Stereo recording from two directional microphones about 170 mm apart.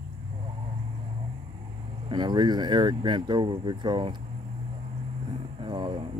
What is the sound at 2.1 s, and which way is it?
Speech, 25° right (ahead or behind).